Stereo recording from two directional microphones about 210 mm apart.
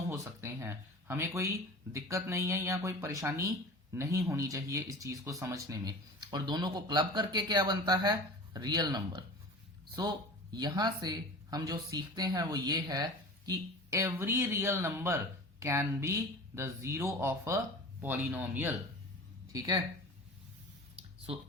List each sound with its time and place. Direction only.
0.1 s speech: 10° right (ahead or behind)